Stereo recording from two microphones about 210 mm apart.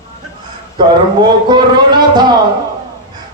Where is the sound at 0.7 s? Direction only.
20° right (ahead or behind).